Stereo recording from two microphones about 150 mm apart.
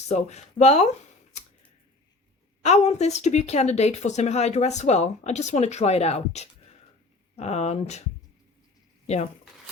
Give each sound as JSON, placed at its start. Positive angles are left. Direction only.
{"t": 0.1, "sound": "speech", "side_deg": 50}
{"t": 2.6, "sound": "speech", "side_deg": 50}
{"t": 9.0, "sound": "speech", "side_deg": 45}